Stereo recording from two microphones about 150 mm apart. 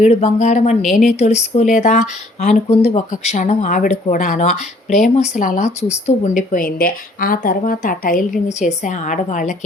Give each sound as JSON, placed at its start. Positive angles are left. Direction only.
{"t": 0.0, "sound": "speech", "side_deg": 45}
{"t": 0.8, "sound": "a woman's voice", "side_deg": 0}
{"t": 1.0, "sound": "speech", "side_deg": 50}